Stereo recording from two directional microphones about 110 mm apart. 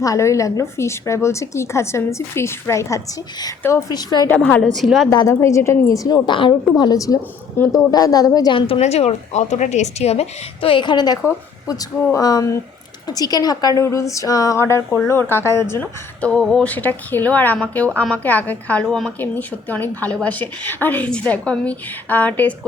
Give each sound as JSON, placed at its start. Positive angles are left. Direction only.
{"t": 0.0, "sound": "a woman's voice", "side_deg": 30}
{"t": 4.5, "sound": "a woman's voice", "side_deg": 5}
{"t": 5.3, "sound": "a woman's voice", "side_deg": 25}
{"t": 8.5, "sound": "a woman's voice", "side_deg": 60}
{"t": 16.2, "sound": "a woman's voice", "side_deg": 10}
{"t": 19.2, "sound": "a woman's voice", "side_deg": 15}